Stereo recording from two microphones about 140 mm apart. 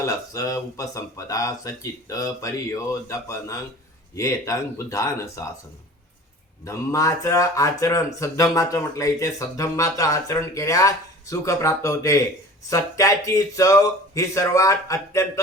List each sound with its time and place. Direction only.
0.0 s speech: 25° left (ahead or behind)
6.7 s speech: 25° left (ahead or behind)